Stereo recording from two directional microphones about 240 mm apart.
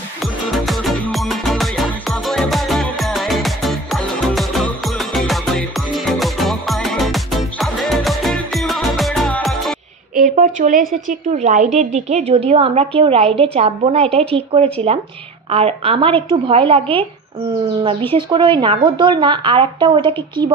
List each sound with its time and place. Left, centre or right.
0.2 s music: centre
10.1 s a sound: right
11.1 s a woman's voice: right
18.1 s a woman's voice: right